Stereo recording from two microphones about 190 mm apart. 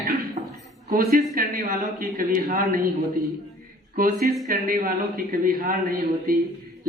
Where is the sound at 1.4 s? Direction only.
50° right (ahead or behind).